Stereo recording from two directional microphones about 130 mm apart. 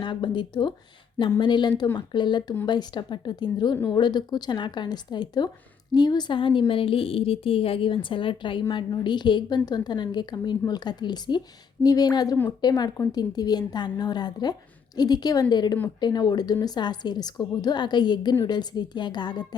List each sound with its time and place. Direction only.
0.0 s a woman's voice: 35° left (ahead or behind)